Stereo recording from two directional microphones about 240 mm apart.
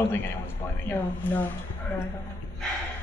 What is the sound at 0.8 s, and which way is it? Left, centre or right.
Speech, centre.